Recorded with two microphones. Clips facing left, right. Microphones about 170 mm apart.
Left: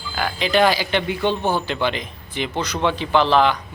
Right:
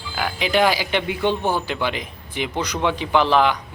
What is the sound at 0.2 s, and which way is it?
Speech, 10° right (ahead or behind).